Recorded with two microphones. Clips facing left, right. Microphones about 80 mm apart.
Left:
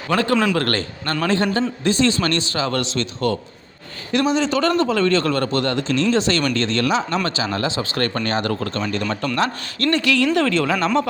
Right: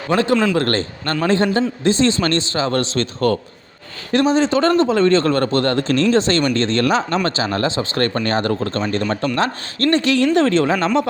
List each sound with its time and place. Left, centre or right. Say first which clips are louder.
0.1 s speech: right 2 dB; right